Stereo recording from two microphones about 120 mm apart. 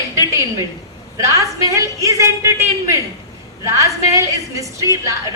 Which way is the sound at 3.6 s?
25° right (ahead or behind).